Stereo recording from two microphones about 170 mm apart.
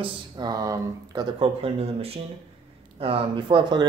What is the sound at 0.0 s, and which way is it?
Speech, 25° right (ahead or behind).